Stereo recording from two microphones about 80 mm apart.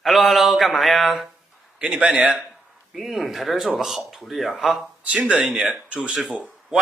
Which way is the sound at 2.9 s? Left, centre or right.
Centre.